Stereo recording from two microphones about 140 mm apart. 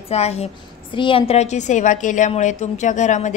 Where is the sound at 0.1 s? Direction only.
50° left (ahead or behind).